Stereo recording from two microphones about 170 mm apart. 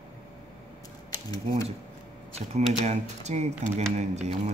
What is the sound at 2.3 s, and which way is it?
Speech, 40° right (ahead or behind).